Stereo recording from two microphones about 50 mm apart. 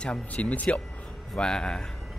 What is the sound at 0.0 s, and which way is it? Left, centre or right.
Speech, left.